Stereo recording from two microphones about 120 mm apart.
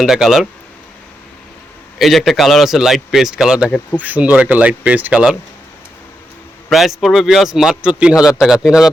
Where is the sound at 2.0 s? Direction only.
Centre (ahead or behind).